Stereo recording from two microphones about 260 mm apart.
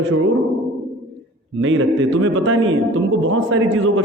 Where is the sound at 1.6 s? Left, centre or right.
Right.